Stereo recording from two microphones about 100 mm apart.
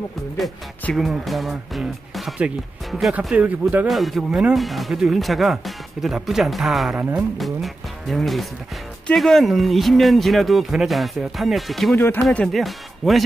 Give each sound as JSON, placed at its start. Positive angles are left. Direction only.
{"t": 0.9, "sound": "speech", "side_deg": 0}
{"t": 3.8, "sound": "speech", "side_deg": 0}
{"t": 11.9, "sound": "speech", "side_deg": 20}
{"t": 12.2, "sound": "speech", "side_deg": 5}